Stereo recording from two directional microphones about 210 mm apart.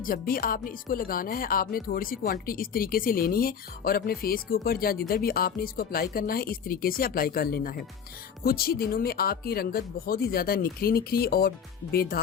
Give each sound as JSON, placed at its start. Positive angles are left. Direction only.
{"t": 0.0, "sound": "speech", "side_deg": 45}